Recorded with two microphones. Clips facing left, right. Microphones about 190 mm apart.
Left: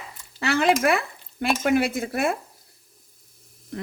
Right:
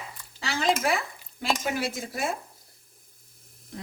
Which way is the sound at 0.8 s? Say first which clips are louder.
Left 5 dB; 60° left (ahead or behind).